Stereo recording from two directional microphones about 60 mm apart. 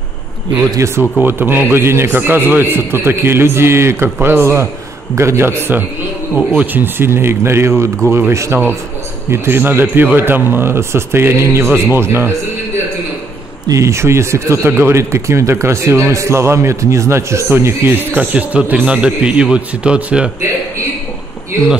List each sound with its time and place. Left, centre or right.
0.7 s speech: right
1.2 s a man's voice: right
6.3 s a man's voice: right
13.7 s speech: right
17.5 s speech: right
18.1 s a man's voice: right